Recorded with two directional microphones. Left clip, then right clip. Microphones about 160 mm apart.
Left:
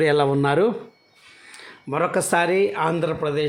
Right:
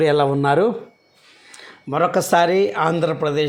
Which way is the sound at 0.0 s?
Centre (ahead or behind).